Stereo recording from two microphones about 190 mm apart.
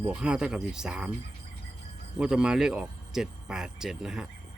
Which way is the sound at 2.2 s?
5° right (ahead or behind).